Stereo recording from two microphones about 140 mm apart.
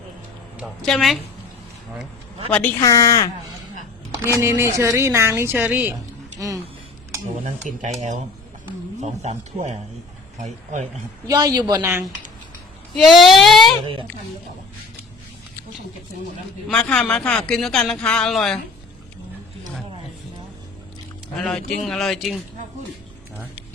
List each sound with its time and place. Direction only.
0.8 s speech: centre (ahead or behind)
2.5 s speech: 10° left (ahead or behind)
2.8 s speech: 25° left (ahead or behind)
4.4 s speech: 20° right (ahead or behind)
7.4 s speech: 55° right (ahead or behind)
11.3 s speech: 30° right (ahead or behind)
11.8 s speech: 15° right (ahead or behind)
13.0 s speech: centre (ahead or behind)
16.6 s speech: 5° left (ahead or behind)
21.3 s speech: 5° left (ahead or behind)